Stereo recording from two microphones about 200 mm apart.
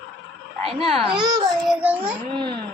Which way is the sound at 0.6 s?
30° right (ahead or behind).